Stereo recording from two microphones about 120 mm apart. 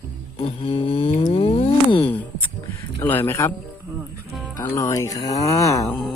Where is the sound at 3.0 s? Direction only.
20° left (ahead or behind).